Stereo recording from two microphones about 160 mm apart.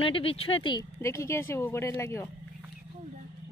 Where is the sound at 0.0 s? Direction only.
35° left (ahead or behind).